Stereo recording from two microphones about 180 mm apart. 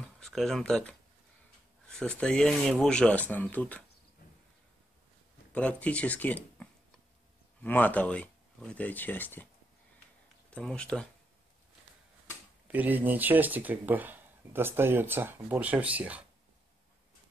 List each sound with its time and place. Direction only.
0.2 s speech: centre (ahead or behind)
2.0 s speech: 5° left (ahead or behind)
5.5 s speech: 5° left (ahead or behind)
10.5 s speech: 5° left (ahead or behind)
12.6 s speech: 10° right (ahead or behind)